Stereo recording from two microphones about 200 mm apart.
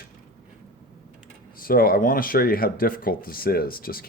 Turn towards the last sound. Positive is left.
turn(degrees=50)  # may be behind; listen again after turning